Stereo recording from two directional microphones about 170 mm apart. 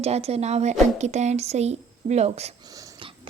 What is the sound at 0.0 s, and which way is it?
Speech, 40° right (ahead or behind).